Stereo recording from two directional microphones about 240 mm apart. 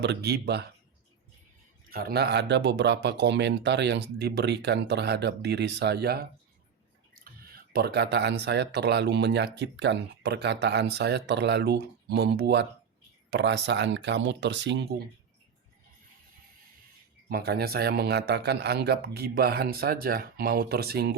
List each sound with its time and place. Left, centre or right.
0.0 s speech: right
1.9 s speech: right
17.2 s a man's voice: right